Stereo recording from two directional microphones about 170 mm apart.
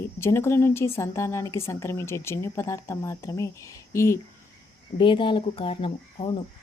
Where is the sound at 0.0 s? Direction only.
15° left (ahead or behind).